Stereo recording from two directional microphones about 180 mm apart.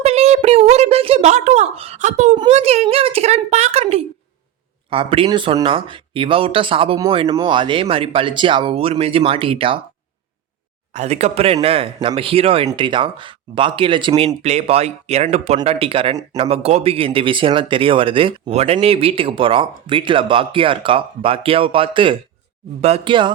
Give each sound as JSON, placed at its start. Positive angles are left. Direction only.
{"t": 0.0, "sound": "speech", "side_deg": -35}
{"t": 10.9, "sound": "speech", "side_deg": -35}
{"t": 14.4, "sound": "speech", "side_deg": -35}